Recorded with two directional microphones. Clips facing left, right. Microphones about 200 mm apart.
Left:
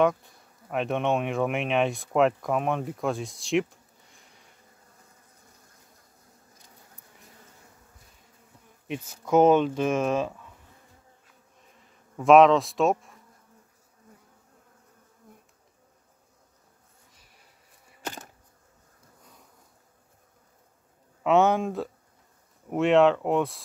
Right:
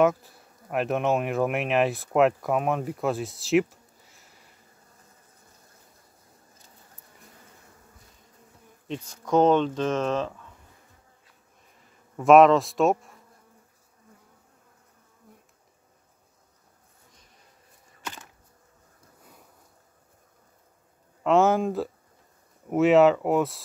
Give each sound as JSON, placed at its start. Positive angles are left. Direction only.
{"t": 0.0, "sound": "speech", "side_deg": -5}
{"t": 8.8, "sound": "speech", "side_deg": 10}
{"t": 12.2, "sound": "speech", "side_deg": 0}
{"t": 21.2, "sound": "speech", "side_deg": 0}